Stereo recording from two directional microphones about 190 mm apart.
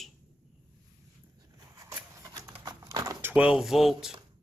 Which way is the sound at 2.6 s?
20° right (ahead or behind).